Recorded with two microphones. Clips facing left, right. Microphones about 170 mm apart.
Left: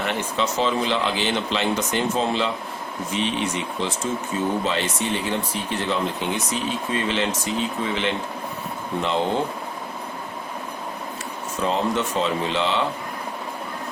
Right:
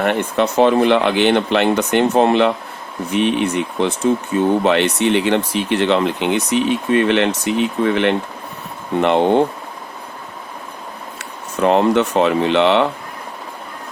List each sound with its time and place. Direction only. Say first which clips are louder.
0.0 s speech: right 8 dB; 60° right (ahead or behind)
11.6 s speech: right 9 dB; 65° right (ahead or behind)